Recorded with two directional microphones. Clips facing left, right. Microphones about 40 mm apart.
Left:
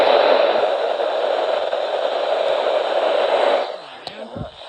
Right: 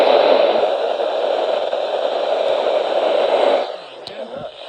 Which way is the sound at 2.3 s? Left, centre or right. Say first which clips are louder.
Right 2 dB; centre.